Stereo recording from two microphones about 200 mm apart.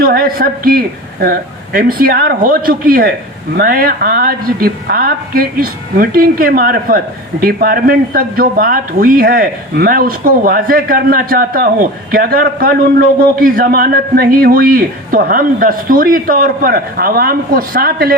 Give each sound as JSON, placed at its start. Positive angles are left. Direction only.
{"t": 0.0, "sound": "a woman's voice", "side_deg": -45}